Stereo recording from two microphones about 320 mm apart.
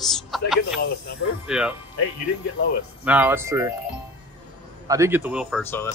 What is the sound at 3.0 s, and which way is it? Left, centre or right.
Speech, centre.